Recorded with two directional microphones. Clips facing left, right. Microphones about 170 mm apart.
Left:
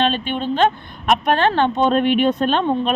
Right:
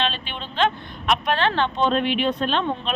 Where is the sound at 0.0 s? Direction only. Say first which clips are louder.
Left 8 dB; 50° left (ahead or behind).